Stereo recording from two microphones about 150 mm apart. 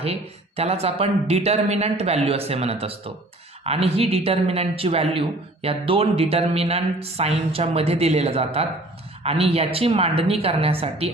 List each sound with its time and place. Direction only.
0.0 s speech: 40° right (ahead or behind)